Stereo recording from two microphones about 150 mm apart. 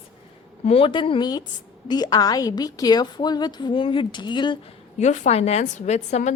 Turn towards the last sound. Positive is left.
turn(degrees=50)  # may be behind; listen again after turning